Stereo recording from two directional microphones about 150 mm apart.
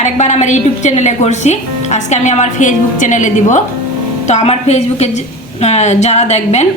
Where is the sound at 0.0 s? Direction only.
50° left (ahead or behind).